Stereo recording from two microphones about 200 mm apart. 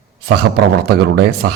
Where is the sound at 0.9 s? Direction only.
55° right (ahead or behind).